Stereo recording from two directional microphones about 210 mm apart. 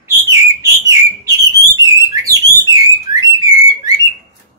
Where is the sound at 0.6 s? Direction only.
15° right (ahead or behind).